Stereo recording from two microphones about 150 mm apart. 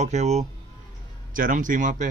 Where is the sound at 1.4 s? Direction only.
60° right (ahead or behind).